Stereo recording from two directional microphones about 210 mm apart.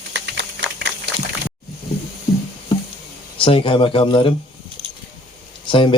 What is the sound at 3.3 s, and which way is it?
Speech, 25° left (ahead or behind).